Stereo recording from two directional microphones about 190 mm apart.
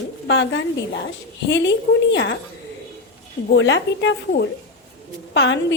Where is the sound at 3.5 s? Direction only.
75° left (ahead or behind).